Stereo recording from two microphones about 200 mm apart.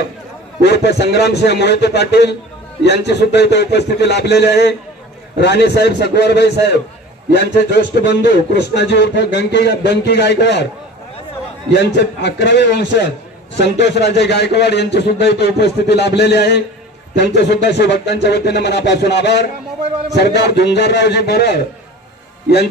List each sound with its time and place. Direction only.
0.7 s a man's voice: 55° left (ahead or behind)
11.7 s a man's voice: 60° left (ahead or behind)